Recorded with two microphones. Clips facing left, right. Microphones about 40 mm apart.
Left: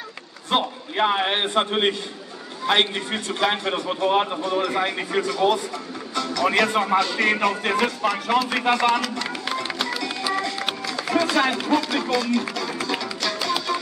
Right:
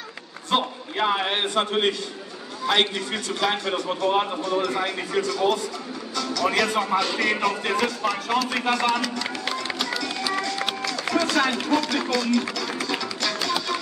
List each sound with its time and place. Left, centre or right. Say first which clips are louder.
0.5 s a man's voice: left 1 dB; centre
9.8 s music: left 1 dB; centre